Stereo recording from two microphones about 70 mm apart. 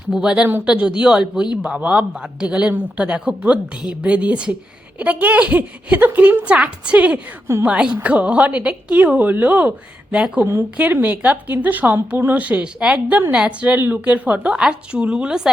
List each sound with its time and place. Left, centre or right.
0.1 s a man's voice: centre
10.2 s a man's voice: centre
10.4 s speech: right
10.8 s a man's voice: right